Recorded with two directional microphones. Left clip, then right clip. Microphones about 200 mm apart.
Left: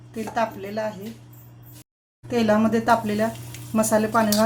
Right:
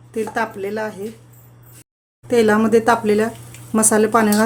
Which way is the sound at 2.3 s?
55° right (ahead or behind).